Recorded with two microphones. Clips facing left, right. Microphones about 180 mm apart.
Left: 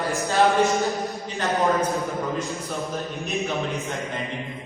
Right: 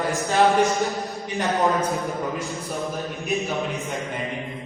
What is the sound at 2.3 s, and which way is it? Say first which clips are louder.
A man's voice: left 1 dB; centre (ahead or behind).